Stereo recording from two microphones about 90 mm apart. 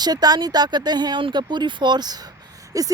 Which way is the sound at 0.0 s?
50° right (ahead or behind).